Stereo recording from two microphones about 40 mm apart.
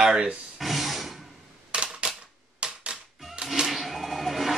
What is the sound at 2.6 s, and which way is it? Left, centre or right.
Typewriter, right.